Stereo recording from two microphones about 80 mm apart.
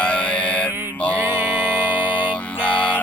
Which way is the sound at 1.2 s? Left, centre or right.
Right.